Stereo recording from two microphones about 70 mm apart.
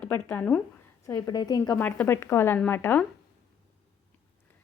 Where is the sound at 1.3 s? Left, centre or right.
Left.